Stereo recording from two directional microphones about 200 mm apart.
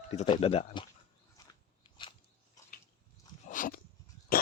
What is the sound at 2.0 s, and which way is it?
Biting, 25° left (ahead or behind).